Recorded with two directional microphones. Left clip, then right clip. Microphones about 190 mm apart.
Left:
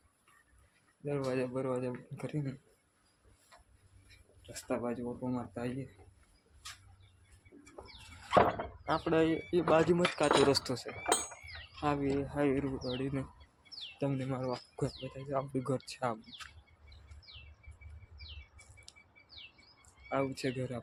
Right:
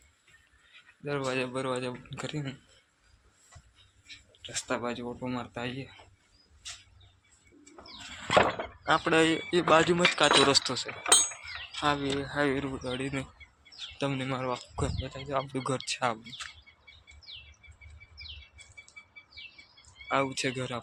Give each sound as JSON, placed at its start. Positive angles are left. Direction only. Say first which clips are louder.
{"t": 1.0, "sound": "speech", "louder": "right 3 dB", "side_deg": 0}
{"t": 4.4, "sound": "speech", "louder": "right 4 dB", "side_deg": 0}
{"t": 8.4, "sound": "speech", "louder": "right 2 dB", "side_deg": -20}
{"t": 9.8, "sound": "speech", "louder": "right 5 dB", "side_deg": 5}
{"t": 10.5, "sound": "speech", "louder": "right 6 dB", "side_deg": 15}
{"t": 11.8, "sound": "speech", "louder": "right 4 dB", "side_deg": 5}
{"t": 20.1, "sound": "speech", "louder": "right 6 dB", "side_deg": -5}